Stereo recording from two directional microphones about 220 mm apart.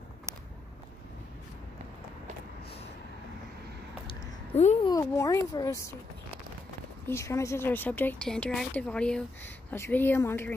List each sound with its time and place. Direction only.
4.8 s a woman's voice: 15° left (ahead or behind)
7.1 s a woman's voice: 15° left (ahead or behind)